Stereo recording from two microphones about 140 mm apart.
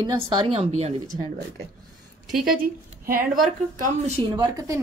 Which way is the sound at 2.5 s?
90° right.